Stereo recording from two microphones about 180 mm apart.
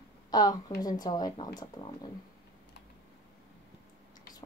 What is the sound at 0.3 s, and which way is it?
Speech, 20° left (ahead or behind).